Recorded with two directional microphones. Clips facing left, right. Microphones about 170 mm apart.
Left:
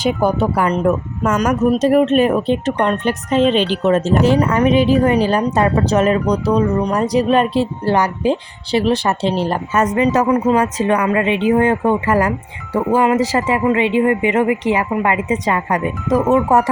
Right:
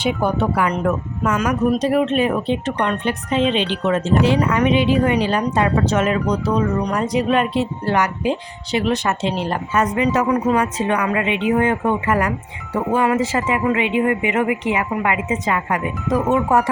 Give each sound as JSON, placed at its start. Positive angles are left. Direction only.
{"t": 0.0, "sound": "speech", "side_deg": 40}